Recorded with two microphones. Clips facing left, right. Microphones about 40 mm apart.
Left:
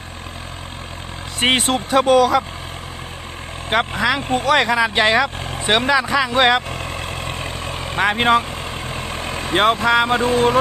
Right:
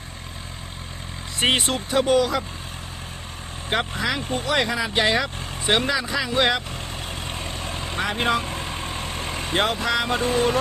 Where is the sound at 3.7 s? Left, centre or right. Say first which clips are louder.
Left 6 dB; left.